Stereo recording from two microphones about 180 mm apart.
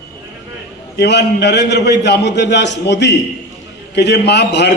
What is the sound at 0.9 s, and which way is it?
A man's voice, 70° left (ahead or behind).